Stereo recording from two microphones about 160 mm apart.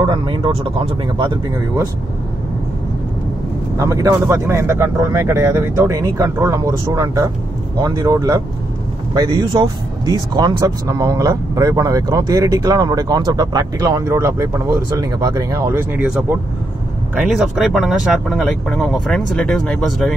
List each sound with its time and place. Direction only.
0.0 s speech: 30° right (ahead or behind)
3.7 s speech: 20° right (ahead or behind); by 20.2 s centre (ahead or behind)